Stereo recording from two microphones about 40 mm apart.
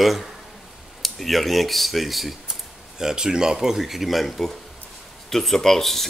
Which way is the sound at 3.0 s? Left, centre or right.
Centre.